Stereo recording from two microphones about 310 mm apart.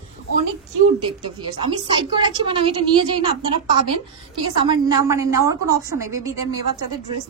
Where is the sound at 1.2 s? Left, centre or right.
Centre.